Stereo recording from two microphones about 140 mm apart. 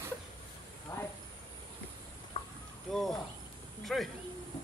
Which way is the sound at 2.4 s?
35° left (ahead or behind).